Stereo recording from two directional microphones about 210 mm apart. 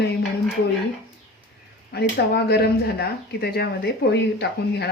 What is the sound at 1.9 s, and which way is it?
Speech, 50° left (ahead or behind).